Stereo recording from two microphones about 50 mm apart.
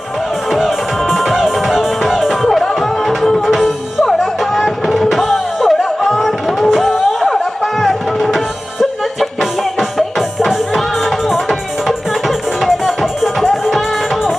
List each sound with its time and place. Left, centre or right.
0.5 s music: centre
9.4 s music: centre
12.6 s music: centre